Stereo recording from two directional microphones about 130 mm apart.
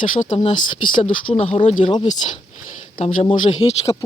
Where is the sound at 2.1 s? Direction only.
65° left (ahead or behind).